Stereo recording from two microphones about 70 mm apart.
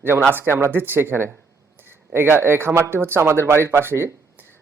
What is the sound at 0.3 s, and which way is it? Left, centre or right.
Speech, right.